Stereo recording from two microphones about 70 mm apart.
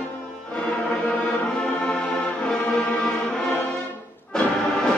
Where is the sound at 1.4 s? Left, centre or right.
Centre.